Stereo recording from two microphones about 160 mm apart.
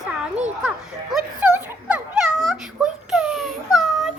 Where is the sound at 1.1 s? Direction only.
5° right (ahead or behind).